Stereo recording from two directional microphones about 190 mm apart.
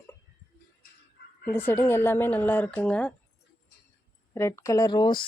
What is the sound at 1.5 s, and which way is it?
Speech, 10° left (ahead or behind).